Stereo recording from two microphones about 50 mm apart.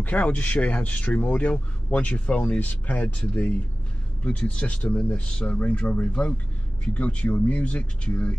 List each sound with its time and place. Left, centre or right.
0.0 s speech: left